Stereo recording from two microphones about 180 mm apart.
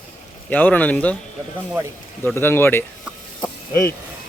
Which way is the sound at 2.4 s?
10° left (ahead or behind).